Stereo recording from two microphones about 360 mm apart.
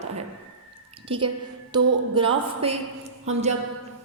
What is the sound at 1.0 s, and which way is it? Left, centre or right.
Speech, centre.